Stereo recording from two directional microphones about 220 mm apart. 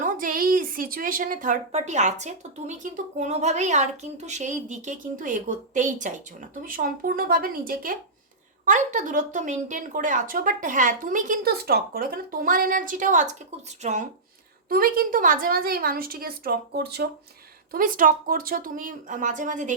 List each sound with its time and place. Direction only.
0.0 s a woman's voice: 40° right (ahead or behind)